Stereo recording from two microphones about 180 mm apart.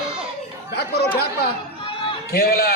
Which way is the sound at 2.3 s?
55° left (ahead or behind).